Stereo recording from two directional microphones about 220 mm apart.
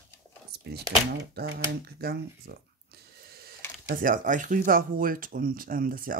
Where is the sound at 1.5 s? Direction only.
45° right (ahead or behind).